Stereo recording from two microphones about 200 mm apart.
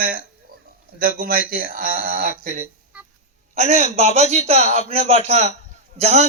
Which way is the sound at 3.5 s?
35° right (ahead or behind).